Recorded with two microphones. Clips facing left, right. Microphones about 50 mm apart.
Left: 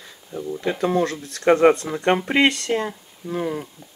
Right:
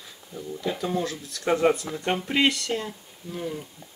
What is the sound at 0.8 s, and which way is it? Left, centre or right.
Speech, left.